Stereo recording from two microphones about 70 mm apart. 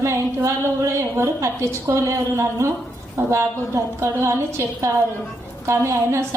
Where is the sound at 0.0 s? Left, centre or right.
Right.